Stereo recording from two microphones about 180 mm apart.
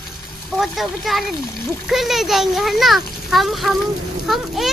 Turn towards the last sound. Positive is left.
turn(degrees=0)  # may be behind; listen again after turning